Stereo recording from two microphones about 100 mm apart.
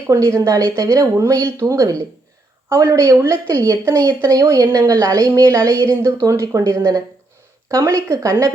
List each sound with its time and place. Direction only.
0.1 s speech: 30° right (ahead or behind)